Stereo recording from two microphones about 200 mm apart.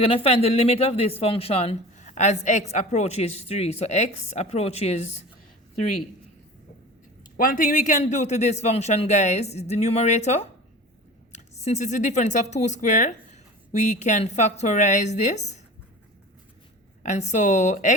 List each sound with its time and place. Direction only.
0.0 s speech: 30° left (ahead or behind)
7.3 s speech: 40° left (ahead or behind)
17.0 s speech: 35° left (ahead or behind)